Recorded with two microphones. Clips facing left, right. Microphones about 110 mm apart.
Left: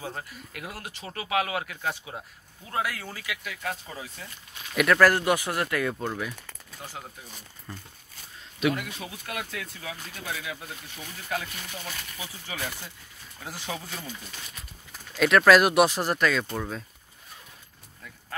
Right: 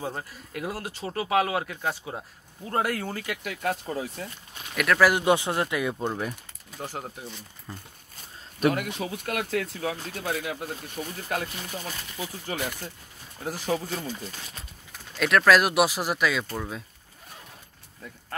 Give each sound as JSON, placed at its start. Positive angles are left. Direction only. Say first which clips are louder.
{"t": 0.0, "sound": "speech", "louder": "right 3 dB", "side_deg": -20}
{"t": 2.0, "sound": "speech", "louder": "right 3 dB", "side_deg": -30}
{"t": 2.7, "sound": "speech", "louder": "right 4 dB", "side_deg": -50}
{"t": 4.7, "sound": "speech", "louder": "left 2 dB", "side_deg": 0}
{"t": 5.0, "sound": "speech", "louder": "right 3 dB", "side_deg": -20}
{"t": 6.8, "sound": "speech", "louder": "right 6 dB", "side_deg": -45}
{"t": 8.5, "sound": "speech", "louder": "right 3 dB", "side_deg": -50}
{"t": 13.4, "sound": "speech", "louder": "right 8 dB", "side_deg": -45}
{"t": 13.7, "sound": "speech", "louder": "right 6 dB", "side_deg": -30}
{"t": 15.1, "sound": "speech", "louder": "left 2 dB", "side_deg": 0}